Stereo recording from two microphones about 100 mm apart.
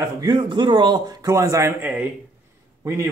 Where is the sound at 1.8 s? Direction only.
15° right (ahead or behind).